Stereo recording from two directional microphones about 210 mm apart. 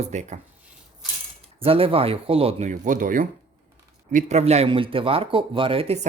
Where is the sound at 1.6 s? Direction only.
25° right (ahead or behind).